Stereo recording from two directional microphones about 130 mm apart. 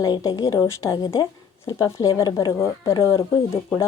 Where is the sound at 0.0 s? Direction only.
30° left (ahead or behind).